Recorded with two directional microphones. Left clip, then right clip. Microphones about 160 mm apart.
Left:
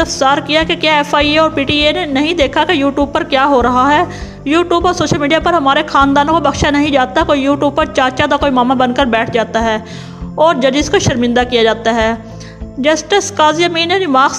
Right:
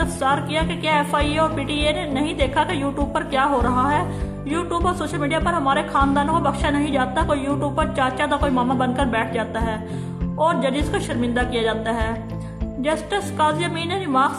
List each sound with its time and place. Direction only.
0.0 s speech: 40° left (ahead or behind)